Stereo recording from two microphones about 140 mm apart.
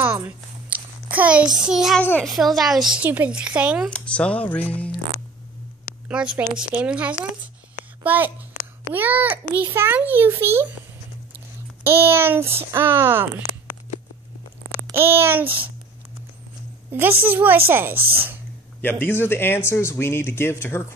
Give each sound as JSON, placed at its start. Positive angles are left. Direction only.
{"t": 0.0, "sound": "a sound", "side_deg": -15}
{"t": 2.0, "sound": "speech", "side_deg": 10}
{"t": 2.2, "sound": "a child's voice", "side_deg": 0}
{"t": 3.9, "sound": "speech", "side_deg": 5}
{"t": 6.0, "sound": "a woman's voice", "side_deg": -10}
{"t": 11.8, "sound": "a child's voice", "side_deg": -15}
{"t": 14.9, "sound": "a child's voice", "side_deg": -15}
{"t": 17.0, "sound": "a child's voice", "side_deg": -15}
{"t": 17.9, "sound": "speech", "side_deg": -90}
{"t": 18.8, "sound": "speech", "side_deg": 15}